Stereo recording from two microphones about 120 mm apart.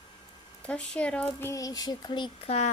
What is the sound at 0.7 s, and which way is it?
Speech, 10° left (ahead or behind).